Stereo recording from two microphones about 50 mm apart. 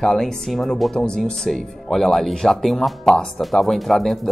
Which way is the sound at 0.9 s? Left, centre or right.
Centre.